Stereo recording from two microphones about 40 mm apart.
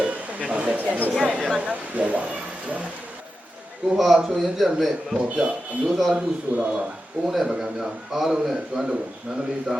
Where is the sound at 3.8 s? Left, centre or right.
Right.